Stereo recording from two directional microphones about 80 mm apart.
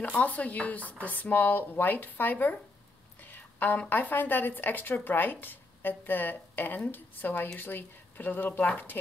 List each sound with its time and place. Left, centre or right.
0.0 s a woman's voice: centre